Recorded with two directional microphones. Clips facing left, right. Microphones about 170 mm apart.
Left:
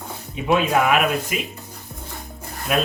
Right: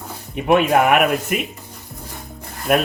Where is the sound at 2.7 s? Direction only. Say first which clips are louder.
Right 4 dB; 55° right (ahead or behind).